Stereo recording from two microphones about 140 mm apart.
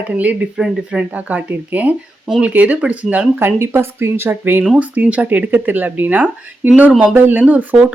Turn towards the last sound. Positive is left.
turn(degrees=-10)  # may be behind; listen again after turning